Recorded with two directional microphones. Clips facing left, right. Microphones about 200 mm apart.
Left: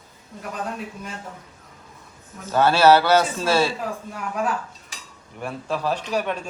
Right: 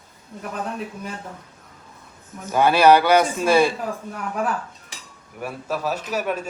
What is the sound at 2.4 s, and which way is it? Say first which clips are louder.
A man's voice: right 1 dB; 15° right (ahead or behind).